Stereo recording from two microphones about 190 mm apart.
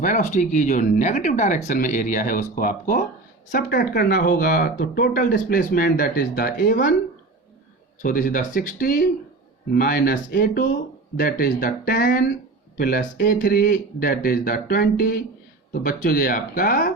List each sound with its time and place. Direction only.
0.0 s speech: 40° left (ahead or behind)
8.0 s speech: 45° left (ahead or behind)